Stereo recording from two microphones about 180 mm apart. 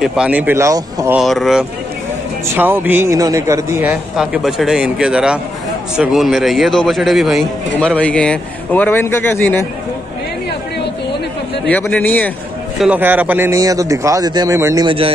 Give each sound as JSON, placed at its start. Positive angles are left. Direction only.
{"t": 0.0, "sound": "a man's voice", "side_deg": -5}
{"t": 1.1, "sound": "a man's voice", "side_deg": 0}
{"t": 2.4, "sound": "a man's voice", "side_deg": -10}
{"t": 11.6, "sound": "speech", "side_deg": 10}
{"t": 12.8, "sound": "a man's voice", "side_deg": -10}